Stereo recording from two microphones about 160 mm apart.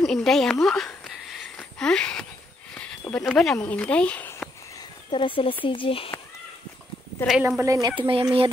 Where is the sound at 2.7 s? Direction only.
5° left (ahead or behind).